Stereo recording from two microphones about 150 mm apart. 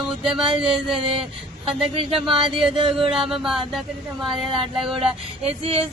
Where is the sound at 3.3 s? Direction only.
5° right (ahead or behind).